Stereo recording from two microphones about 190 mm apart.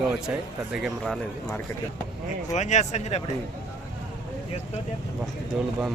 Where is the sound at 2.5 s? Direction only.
40° left (ahead or behind).